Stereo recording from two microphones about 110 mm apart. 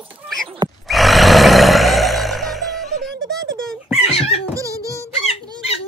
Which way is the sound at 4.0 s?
65° left (ahead or behind).